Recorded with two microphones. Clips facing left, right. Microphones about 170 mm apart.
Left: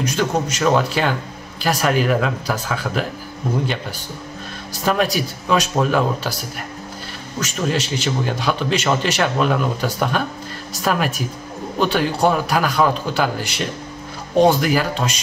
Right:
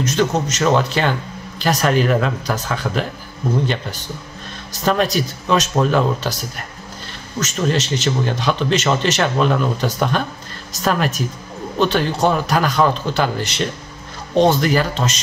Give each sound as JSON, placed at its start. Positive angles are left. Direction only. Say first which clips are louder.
{"t": 0.0, "sound": "a man's voice", "louder": "right 2 dB", "side_deg": 10}
{"t": 4.8, "sound": "speech", "louder": "right 1 dB", "side_deg": 5}
{"t": 7.3, "sound": "a man's voice", "louder": "right 2 dB", "side_deg": 10}